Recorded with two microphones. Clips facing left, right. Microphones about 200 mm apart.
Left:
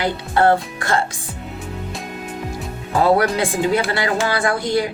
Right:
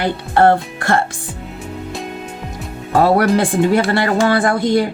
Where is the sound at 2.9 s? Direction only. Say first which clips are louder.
Right 3 dB; 60° right (ahead or behind).